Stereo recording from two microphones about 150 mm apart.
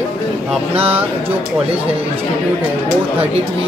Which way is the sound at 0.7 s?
40° right (ahead or behind).